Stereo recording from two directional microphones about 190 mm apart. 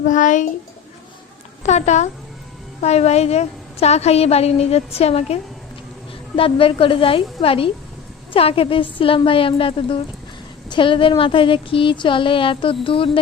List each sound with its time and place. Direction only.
0.0 s a woman's voice: 40° left (ahead or behind)
1.6 s a woman's voice: 35° left (ahead or behind)